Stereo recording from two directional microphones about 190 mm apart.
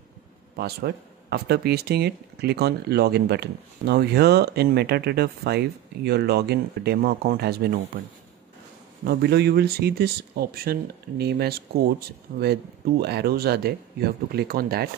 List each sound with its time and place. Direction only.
0.6 s speech: 55° right (ahead or behind)
9.0 s speech: 55° right (ahead or behind)
13.0 s speech: 55° right (ahead or behind)